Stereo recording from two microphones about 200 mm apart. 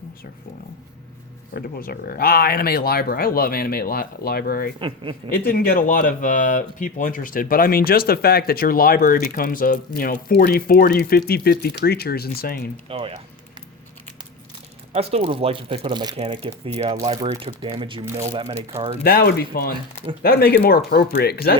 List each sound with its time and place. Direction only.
1.5 s speech: 50° left (ahead or behind)
4.8 s speech: 25° right (ahead or behind)
5.3 s speech: 45° left (ahead or behind)
12.9 s speech: 30° right (ahead or behind)
14.9 s speech: 30° right (ahead or behind)
19.0 s speech: 50° left (ahead or behind)